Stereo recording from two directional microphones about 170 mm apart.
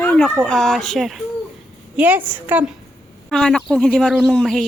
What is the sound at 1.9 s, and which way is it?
Speech, 10° right (ahead or behind).